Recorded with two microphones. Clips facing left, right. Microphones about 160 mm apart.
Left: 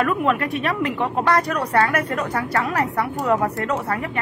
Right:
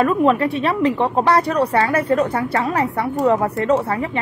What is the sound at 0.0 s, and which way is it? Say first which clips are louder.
A woman's voice: right 5 dB; 30° right (ahead or behind).